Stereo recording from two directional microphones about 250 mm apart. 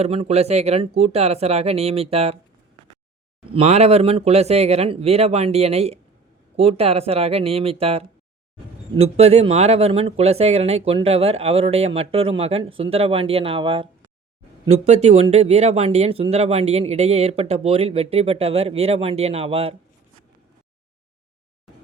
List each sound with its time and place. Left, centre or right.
0.0 s speech: right
3.5 s speech: right